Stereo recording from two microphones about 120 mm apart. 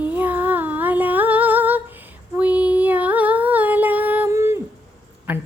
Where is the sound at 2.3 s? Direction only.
10° right (ahead or behind).